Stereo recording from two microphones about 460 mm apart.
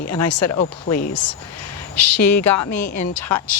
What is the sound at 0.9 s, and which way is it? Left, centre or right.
Speech, centre.